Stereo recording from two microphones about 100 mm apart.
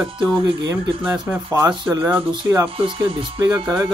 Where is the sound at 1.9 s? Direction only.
20° right (ahead or behind).